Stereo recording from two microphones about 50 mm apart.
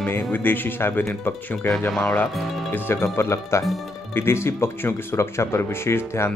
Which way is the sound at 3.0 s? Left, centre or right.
Left.